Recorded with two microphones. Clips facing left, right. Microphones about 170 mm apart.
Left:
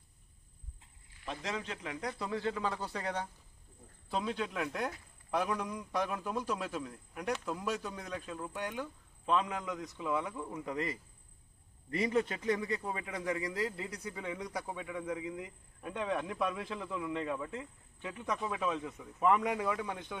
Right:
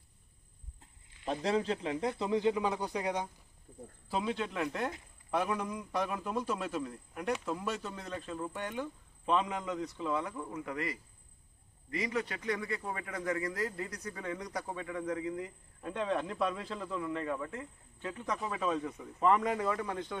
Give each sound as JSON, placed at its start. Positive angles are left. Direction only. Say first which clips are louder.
{"t": 1.3, "sound": "a man's voice", "louder": "right 8 dB", "side_deg": -35}
{"t": 4.1, "sound": "a man's voice", "louder": "right 1 dB", "side_deg": -5}
{"t": 10.7, "sound": "a man's voice", "louder": "left 1 dB", "side_deg": 20}
{"t": 18.3, "sound": "a man's voice", "louder": "right 1 dB", "side_deg": 0}